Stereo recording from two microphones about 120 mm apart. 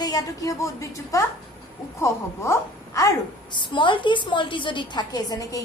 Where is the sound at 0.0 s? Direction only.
30° left (ahead or behind).